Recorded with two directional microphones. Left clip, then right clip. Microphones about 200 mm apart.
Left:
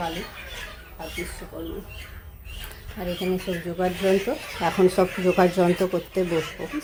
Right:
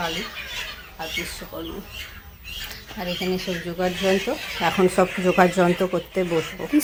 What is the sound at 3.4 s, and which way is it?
Speech, 5° left (ahead or behind).